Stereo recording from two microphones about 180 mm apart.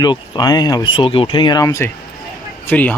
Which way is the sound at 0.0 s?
25° left (ahead or behind).